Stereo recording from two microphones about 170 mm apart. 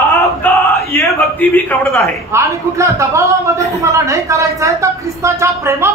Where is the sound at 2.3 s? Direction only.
15° right (ahead or behind).